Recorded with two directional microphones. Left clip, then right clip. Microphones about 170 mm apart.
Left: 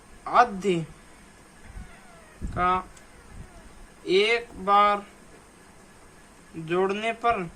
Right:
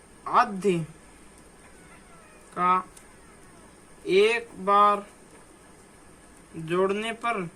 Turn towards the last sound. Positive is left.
turn(degrees=15)  # may be behind; listen again after turning